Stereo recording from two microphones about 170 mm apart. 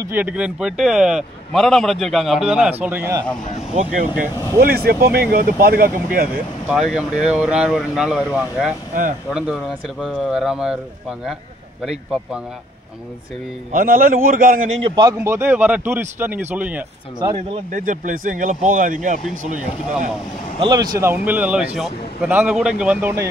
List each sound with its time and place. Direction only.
0.0 s a man's voice: 10° right (ahead or behind)
2.8 s speech: 15° right (ahead or behind)
3.7 s speech: 50° right (ahead or behind)
6.7 s a man's voice: 5° right (ahead or behind)
13.7 s speech: 55° right (ahead or behind)
14.8 s a man's voice: 30° right (ahead or behind)
15.1 s speech: 15° right (ahead or behind)
17.2 s a man's voice: 25° right (ahead or behind)
17.6 s speech: 50° right (ahead or behind)
20.5 s a man's voice: 25° right (ahead or behind)
21.0 s speech: 10° right (ahead or behind)